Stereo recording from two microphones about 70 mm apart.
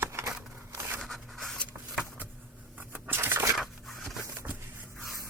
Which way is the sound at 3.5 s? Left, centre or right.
Centre.